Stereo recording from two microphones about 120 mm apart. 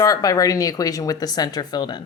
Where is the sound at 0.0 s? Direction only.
30° left (ahead or behind).